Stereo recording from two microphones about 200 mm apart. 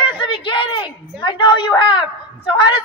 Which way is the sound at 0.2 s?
25° left (ahead or behind).